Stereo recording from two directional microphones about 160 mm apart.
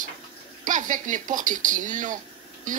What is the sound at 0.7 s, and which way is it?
Speech, 55° right (ahead or behind).